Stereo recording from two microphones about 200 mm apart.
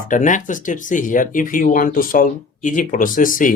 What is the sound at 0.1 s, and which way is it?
Speech, 40° left (ahead or behind).